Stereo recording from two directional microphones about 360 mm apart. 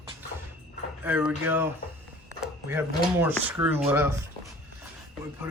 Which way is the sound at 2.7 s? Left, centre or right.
Centre.